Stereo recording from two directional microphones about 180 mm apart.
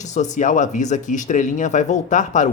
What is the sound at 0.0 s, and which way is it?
A woman's voice, 40° left (ahead or behind).